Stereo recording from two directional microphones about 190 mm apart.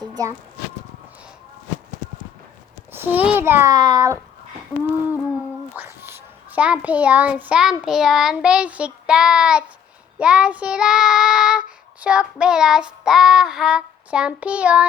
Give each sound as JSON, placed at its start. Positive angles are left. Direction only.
{"t": 0.2, "sound": "a child's voice", "side_deg": -20}
{"t": 2.9, "sound": "a child's voice", "side_deg": -10}
{"t": 5.7, "sound": "a child's voice", "side_deg": -10}
{"t": 10.2, "sound": "child singing", "side_deg": -5}